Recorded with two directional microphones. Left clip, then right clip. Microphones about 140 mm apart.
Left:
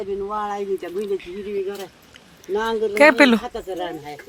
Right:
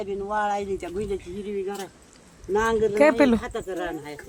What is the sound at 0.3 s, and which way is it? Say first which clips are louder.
Speech: right 2 dB; 55° right (ahead or behind).